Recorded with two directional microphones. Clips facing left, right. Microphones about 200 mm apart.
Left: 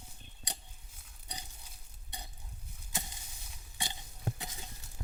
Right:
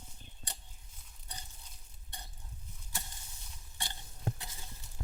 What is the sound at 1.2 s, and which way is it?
Pig, 15° left (ahead or behind).